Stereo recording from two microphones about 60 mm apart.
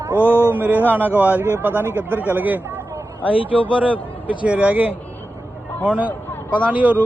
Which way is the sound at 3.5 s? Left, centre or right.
Left.